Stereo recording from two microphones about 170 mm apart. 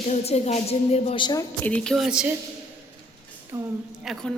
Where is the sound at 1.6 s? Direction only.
5° left (ahead or behind).